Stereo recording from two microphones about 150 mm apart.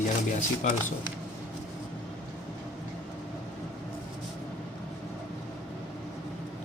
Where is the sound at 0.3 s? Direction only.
55° left (ahead or behind).